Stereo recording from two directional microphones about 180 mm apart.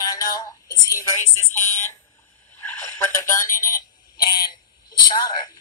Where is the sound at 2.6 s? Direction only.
15° left (ahead or behind).